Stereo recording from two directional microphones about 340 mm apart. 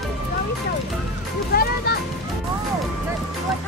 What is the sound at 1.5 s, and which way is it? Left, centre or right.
Music, left.